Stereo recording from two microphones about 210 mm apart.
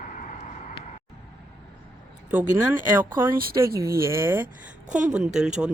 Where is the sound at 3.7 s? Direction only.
15° right (ahead or behind).